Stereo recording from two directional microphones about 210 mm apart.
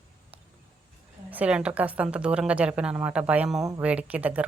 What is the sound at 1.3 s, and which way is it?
A woman's voice, 5° right (ahead or behind).